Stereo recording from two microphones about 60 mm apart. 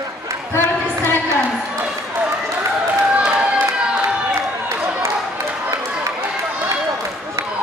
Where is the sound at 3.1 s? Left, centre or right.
Centre.